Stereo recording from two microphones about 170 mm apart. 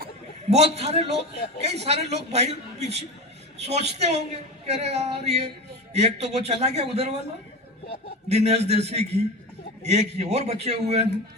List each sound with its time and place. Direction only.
0.5 s a man's voice: 40° right (ahead or behind)
8.3 s a man's voice: 40° right (ahead or behind)